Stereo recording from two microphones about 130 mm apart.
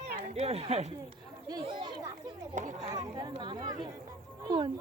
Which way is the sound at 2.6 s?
75° right (ahead or behind).